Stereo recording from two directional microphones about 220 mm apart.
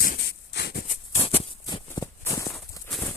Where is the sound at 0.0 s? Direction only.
45° left (ahead or behind).